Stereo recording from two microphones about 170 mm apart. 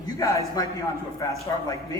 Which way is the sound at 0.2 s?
20° left (ahead or behind).